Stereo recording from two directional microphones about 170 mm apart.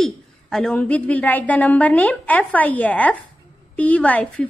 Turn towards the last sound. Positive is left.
turn(degrees=10)  # may be behind; listen again after turning